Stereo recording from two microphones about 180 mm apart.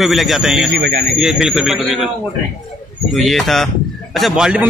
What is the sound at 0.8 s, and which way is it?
Speech, 65° right (ahead or behind).